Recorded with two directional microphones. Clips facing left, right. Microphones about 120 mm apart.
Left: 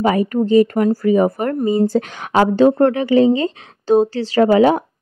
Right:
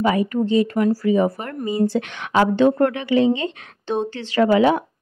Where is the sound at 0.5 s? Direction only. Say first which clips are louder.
Left 6 dB; 45° left (ahead or behind).